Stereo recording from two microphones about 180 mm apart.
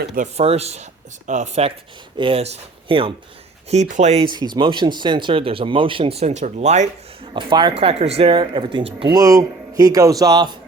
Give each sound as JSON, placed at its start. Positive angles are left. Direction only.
{"t": 0.3, "sound": "speech", "side_deg": -35}
{"t": 4.3, "sound": "speech", "side_deg": -25}
{"t": 7.3, "sound": "speech", "side_deg": -25}